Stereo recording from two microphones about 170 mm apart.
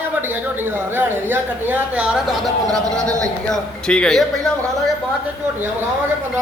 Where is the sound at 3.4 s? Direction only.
5° left (ahead or behind).